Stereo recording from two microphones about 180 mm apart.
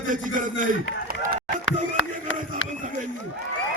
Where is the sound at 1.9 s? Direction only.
90° left.